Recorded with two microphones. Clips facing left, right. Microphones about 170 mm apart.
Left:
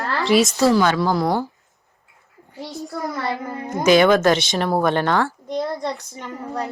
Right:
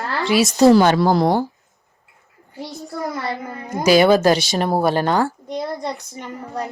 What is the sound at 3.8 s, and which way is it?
Speech, 35° right (ahead or behind).